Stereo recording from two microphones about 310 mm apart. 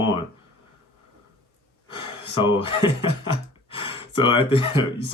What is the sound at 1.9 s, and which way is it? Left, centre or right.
Speech, centre.